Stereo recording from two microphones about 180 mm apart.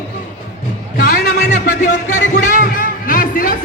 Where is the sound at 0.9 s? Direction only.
60° left (ahead or behind).